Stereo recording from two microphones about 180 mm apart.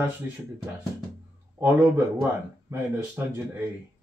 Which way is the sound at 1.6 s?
15° right (ahead or behind).